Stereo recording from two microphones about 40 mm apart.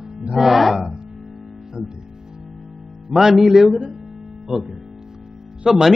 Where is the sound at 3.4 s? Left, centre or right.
Centre.